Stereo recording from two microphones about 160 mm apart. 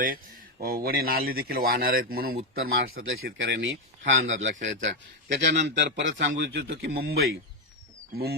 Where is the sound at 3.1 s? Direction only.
80° right.